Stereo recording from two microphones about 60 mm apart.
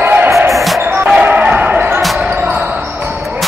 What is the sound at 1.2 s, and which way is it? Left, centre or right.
Basketball bounce, right.